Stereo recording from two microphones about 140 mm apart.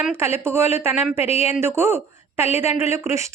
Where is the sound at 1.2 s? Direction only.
50° left (ahead or behind).